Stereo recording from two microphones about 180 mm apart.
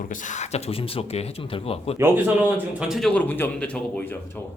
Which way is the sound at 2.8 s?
Centre (ahead or behind).